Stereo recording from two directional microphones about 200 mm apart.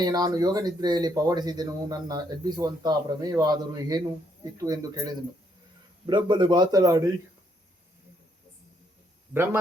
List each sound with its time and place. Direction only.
0.0 s speech: 20° right (ahead or behind)
9.3 s speech: 10° right (ahead or behind)